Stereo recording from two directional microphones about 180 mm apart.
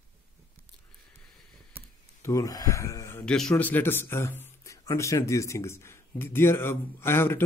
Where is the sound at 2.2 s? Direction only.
20° left (ahead or behind).